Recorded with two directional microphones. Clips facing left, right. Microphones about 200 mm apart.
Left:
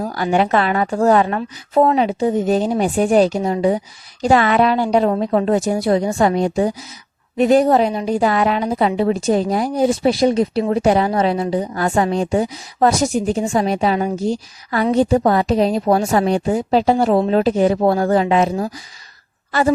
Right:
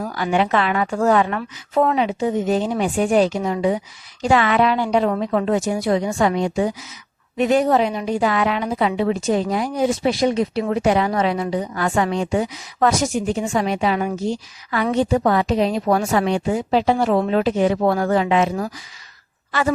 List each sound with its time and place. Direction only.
0.0 s a woman's voice: 40° left (ahead or behind)